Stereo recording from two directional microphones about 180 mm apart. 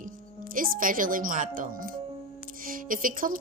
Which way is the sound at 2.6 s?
50° right (ahead or behind).